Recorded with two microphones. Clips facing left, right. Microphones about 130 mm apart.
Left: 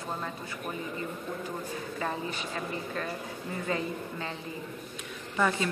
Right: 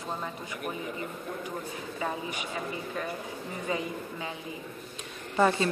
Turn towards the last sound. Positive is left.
turn(degrees=-30)  # may be behind; listen again after turning